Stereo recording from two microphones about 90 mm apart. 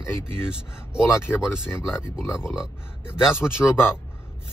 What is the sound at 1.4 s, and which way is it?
Speech, 10° right (ahead or behind).